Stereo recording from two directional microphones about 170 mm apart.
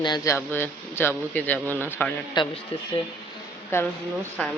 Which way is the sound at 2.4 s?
25° left (ahead or behind).